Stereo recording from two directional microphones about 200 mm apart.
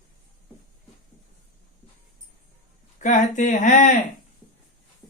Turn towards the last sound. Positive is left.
turn(degrees=40)  # may be behind; listen again after turning